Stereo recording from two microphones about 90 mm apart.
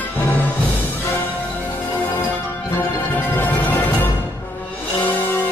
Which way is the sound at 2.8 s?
20° left (ahead or behind).